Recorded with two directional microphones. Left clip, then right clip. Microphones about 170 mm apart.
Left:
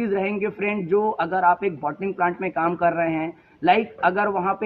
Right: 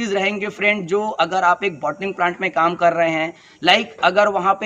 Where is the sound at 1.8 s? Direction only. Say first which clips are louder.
Right 3 dB; 30° right (ahead or behind).